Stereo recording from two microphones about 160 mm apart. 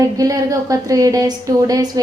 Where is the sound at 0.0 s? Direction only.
20° right (ahead or behind).